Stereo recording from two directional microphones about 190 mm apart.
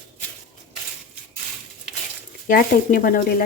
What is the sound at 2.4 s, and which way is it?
Speech, 50° left (ahead or behind).